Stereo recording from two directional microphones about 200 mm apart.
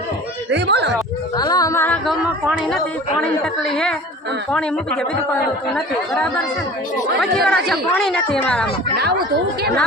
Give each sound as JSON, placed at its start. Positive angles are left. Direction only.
{"t": 0.5, "sound": "a sound", "side_deg": -60}
{"t": 1.4, "sound": "speech", "side_deg": 20}
{"t": 2.0, "sound": "a sound", "side_deg": -5}
{"t": 3.2, "sound": "speech", "side_deg": 5}
{"t": 7.2, "sound": "speech", "side_deg": 0}
{"t": 9.0, "sound": "speech", "side_deg": -50}